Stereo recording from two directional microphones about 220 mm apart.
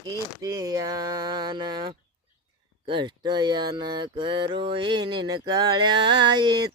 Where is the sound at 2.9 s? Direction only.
20° right (ahead or behind).